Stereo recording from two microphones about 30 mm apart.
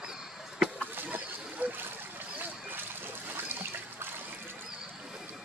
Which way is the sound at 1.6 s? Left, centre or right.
Right.